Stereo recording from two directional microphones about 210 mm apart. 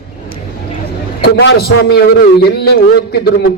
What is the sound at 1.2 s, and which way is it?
A man's voice, 50° left (ahead or behind).